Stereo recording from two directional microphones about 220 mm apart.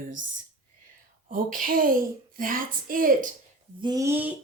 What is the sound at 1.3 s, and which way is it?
Speech, 40° right (ahead or behind).